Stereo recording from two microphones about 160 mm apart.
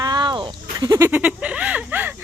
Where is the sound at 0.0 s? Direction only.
30° right (ahead or behind).